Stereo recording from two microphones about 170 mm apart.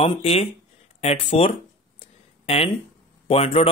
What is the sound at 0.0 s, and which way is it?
A man's voice, 35° left (ahead or behind).